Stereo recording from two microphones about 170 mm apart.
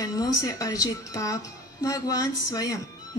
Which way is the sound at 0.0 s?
20° left (ahead or behind).